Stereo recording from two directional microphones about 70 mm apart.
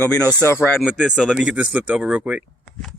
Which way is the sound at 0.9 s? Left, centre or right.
Centre.